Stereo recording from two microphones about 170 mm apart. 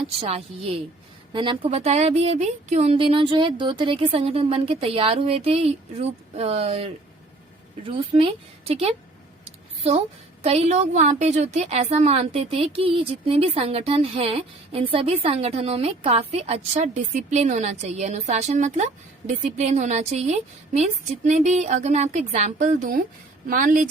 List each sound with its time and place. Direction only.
0.0 s a woman's voice: 35° right (ahead or behind)
9.4 s a sound: 35° right (ahead or behind)
10.4 s a woman's voice: 35° right (ahead or behind)